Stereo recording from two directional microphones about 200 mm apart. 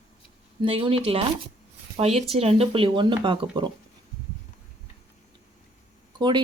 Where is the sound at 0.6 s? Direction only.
25° right (ahead or behind).